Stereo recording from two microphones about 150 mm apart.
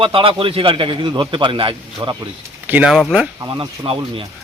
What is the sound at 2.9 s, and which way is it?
Speech, centre (ahead or behind).